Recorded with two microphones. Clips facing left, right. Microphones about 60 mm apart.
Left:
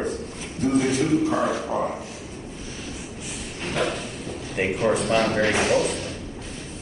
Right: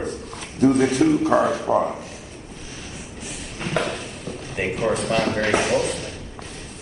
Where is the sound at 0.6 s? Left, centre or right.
Right.